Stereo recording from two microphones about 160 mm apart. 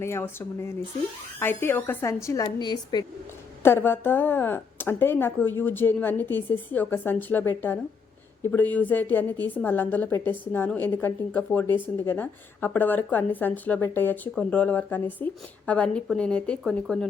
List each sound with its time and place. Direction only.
0.0 s a woman's voice: 15° left (ahead or behind)
3.6 s a woman's voice: 15° left (ahead or behind)